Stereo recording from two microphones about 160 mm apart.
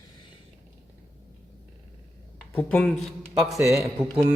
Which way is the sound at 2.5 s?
10° left (ahead or behind).